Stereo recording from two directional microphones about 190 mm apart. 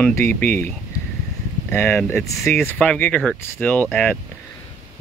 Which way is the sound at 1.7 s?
10° left (ahead or behind).